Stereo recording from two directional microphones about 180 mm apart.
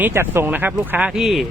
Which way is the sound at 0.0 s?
15° right (ahead or behind).